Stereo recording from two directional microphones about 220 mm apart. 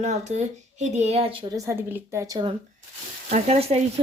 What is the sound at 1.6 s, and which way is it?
Speech, 10° right (ahead or behind).